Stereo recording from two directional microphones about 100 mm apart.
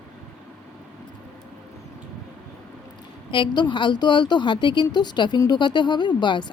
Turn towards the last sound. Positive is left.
turn(degrees=50)  # may be behind; listen again after turning